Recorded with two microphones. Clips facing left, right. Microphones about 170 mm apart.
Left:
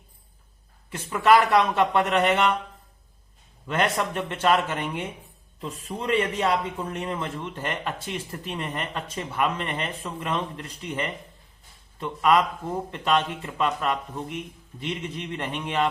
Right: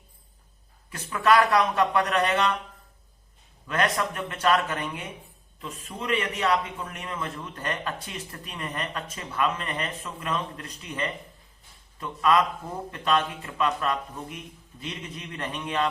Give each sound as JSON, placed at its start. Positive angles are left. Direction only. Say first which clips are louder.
{"t": 0.9, "sound": "a man's voice", "louder": "left 3 dB", "side_deg": 25}
{"t": 3.7, "sound": "a man's voice", "louder": "left 1 dB", "side_deg": 25}